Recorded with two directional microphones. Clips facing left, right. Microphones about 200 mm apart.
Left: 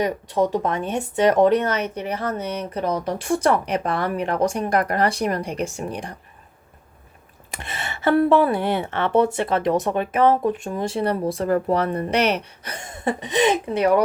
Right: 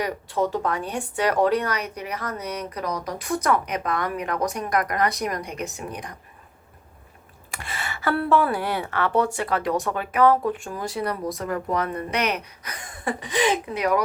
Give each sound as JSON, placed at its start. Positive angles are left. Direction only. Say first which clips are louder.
{"t": 0.0, "sound": "speech", "louder": "left 4 dB", "side_deg": 20}
{"t": 7.5, "sound": "a sound", "louder": "left 1 dB", "side_deg": 20}
{"t": 8.3, "sound": "speech", "louder": "left 4 dB", "side_deg": 20}